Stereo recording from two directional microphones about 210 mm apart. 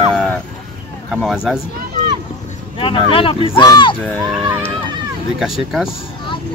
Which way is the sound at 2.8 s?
25° left (ahead or behind).